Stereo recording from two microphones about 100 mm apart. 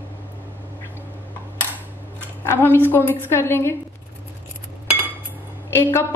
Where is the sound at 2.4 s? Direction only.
25° left (ahead or behind).